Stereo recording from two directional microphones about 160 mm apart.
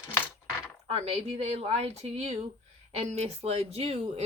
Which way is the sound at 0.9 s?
40° right (ahead or behind).